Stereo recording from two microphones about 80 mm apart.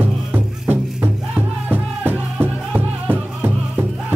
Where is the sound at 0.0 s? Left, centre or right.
Right.